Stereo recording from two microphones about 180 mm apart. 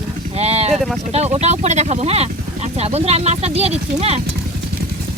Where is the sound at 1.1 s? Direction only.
35° right (ahead or behind).